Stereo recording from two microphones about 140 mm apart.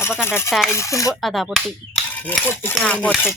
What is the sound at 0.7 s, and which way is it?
Cutlery, 20° left (ahead or behind).